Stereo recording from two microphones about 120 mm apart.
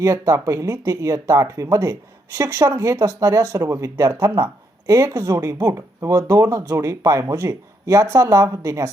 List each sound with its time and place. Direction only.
0.0 s speech: 25° right (ahead or behind)